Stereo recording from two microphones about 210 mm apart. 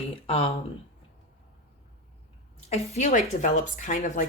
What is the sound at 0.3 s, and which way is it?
Speech, 30° left (ahead or behind).